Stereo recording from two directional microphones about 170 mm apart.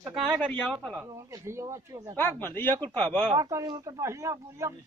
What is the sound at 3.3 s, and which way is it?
Speech, 20° right (ahead or behind).